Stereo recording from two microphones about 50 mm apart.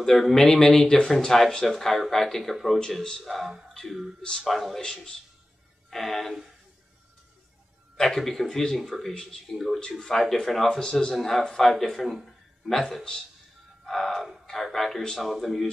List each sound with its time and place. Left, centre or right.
0.0 s speech: centre
3.0 s speech: centre
3.3 s speech: centre
4.2 s speech: centre
4.8 s speech: centre
5.9 s speech: centre
8.0 s speech: centre
9.8 s speech: centre
13.8 s music: centre
14.4 s speech: centre